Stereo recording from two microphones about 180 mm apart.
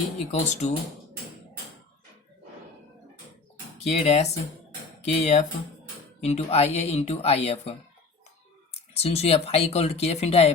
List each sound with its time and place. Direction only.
0.3 s speech: 40° left (ahead or behind)
3.8 s speech: 35° left (ahead or behind)
9.0 s speech: 35° left (ahead or behind)